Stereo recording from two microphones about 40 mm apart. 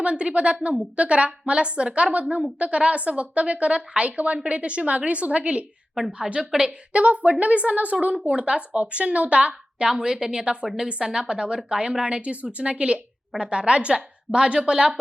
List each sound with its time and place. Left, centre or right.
0.0 s a woman's voice: right
9.8 s a woman's voice: centre